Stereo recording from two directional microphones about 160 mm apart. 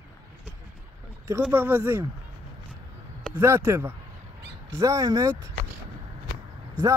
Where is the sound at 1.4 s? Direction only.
10° right (ahead or behind).